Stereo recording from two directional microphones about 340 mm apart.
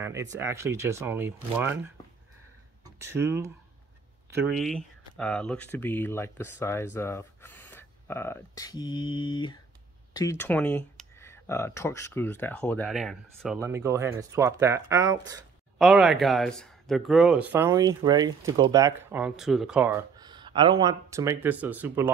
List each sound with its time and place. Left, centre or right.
0.3 s speech: centre
2.8 s speech: centre